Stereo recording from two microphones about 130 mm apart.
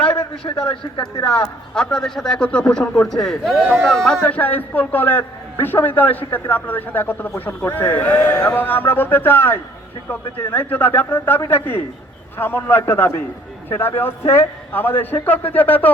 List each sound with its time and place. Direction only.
0.6 s speech: 40° left (ahead or behind)
1.7 s a man's voice: 5° left (ahead or behind)